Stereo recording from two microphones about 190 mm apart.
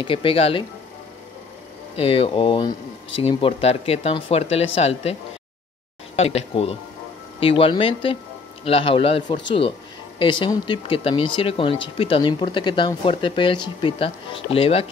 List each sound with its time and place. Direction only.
0.0 s speech: 30° left (ahead or behind)
2.0 s speech: 30° left (ahead or behind)
6.1 s speech: 35° left (ahead or behind)